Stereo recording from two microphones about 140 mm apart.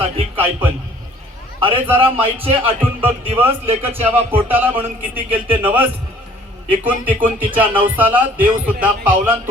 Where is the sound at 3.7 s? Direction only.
45° right (ahead or behind).